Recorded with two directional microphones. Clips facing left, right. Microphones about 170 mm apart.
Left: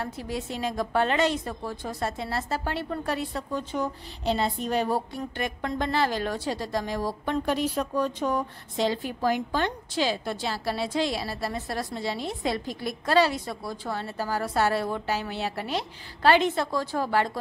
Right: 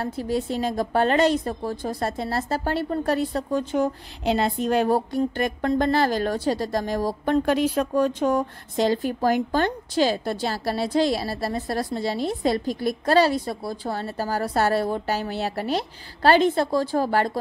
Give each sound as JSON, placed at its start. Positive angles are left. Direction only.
{"t": 0.0, "sound": "a woman's voice", "side_deg": -35}
{"t": 4.4, "sound": "a woman's voice", "side_deg": -55}